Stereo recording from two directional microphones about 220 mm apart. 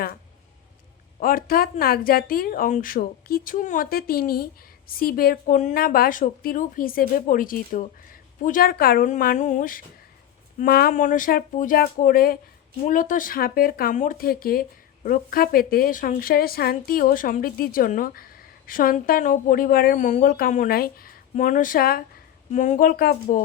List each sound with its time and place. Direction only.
1.2 s speech: 40° left (ahead or behind)